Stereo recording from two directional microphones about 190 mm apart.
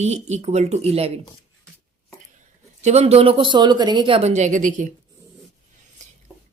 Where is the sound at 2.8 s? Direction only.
35° right (ahead or behind).